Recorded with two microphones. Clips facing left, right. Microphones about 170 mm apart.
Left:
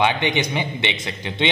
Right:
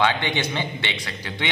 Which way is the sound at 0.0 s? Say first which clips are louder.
Left 2 dB; 20° left (ahead or behind).